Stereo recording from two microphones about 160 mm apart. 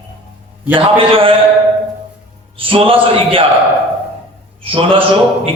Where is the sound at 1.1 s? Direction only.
35° right (ahead or behind).